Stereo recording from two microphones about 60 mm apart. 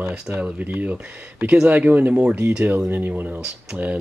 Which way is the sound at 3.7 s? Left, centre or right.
Centre.